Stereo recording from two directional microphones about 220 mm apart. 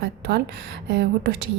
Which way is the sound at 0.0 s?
50° right (ahead or behind).